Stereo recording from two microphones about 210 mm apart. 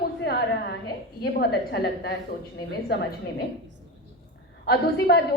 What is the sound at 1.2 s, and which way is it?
Speech, 50° left (ahead or behind).